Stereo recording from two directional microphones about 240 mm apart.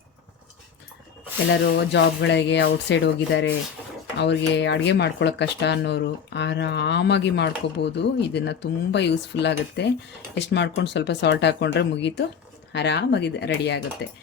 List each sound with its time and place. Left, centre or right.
1.6 s speech: left